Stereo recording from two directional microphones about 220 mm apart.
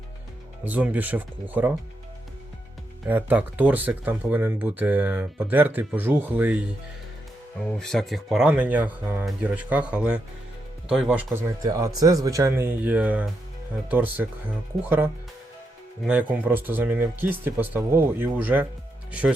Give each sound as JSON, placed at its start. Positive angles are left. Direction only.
{"t": 0.6, "sound": "speech", "side_deg": -5}
{"t": 3.1, "sound": "speech", "side_deg": -10}
{"t": 7.8, "sound": "speech", "side_deg": 0}